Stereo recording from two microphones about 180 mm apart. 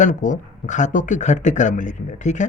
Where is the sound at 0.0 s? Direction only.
45° left (ahead or behind).